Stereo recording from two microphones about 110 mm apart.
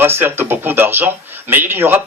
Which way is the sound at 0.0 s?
20° right (ahead or behind).